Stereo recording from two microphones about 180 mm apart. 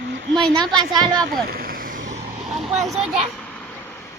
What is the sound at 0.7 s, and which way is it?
Speech, 25° right (ahead or behind).